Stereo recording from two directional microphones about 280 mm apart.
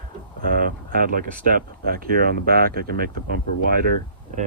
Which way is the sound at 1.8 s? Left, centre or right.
Right.